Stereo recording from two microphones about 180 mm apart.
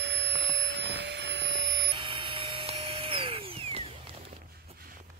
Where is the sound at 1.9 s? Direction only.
25° right (ahead or behind).